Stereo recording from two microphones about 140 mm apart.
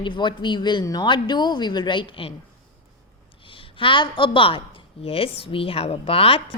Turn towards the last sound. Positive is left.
turn(degrees=45)  # may be behind; listen again after turning